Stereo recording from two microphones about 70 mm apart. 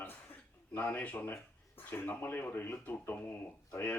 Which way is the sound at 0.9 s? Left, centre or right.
Left.